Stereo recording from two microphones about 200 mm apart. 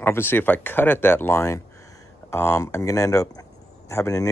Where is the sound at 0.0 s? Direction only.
10° left (ahead or behind).